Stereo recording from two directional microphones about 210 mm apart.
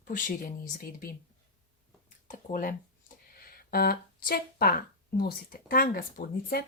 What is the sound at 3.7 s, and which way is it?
Speech, 45° left (ahead or behind).